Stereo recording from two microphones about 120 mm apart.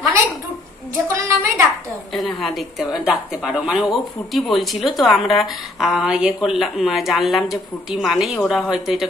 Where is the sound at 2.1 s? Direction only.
Centre (ahead or behind).